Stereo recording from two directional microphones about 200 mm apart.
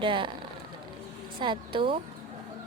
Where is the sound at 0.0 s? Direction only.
25° right (ahead or behind).